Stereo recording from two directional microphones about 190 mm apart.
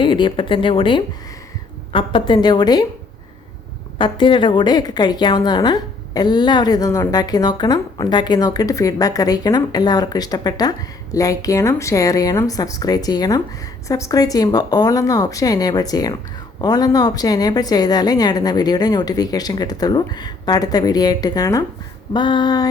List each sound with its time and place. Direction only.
0.0 s a woman's voice: 25° left (ahead or behind)
3.9 s a woman's voice: 25° left (ahead or behind)